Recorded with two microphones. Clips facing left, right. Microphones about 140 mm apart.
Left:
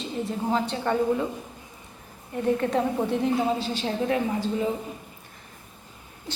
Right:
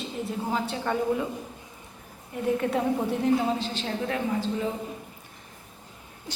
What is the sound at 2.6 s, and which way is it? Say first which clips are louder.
Speech: left 1 dB; 5° right (ahead or behind).